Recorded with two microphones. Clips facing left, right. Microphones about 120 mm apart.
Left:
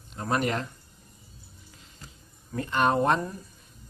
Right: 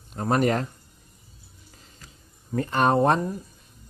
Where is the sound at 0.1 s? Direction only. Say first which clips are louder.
Right 5 dB; 40° right (ahead or behind).